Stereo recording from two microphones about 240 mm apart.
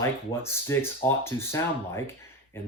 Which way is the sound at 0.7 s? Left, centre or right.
Centre.